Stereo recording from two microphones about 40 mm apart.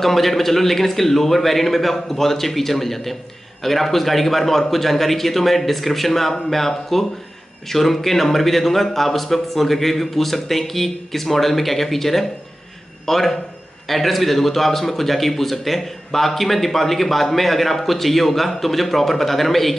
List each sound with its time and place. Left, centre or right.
0.0 s a man's voice: centre